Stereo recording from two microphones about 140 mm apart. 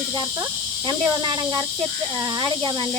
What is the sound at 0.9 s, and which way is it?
Speech, 30° right (ahead or behind).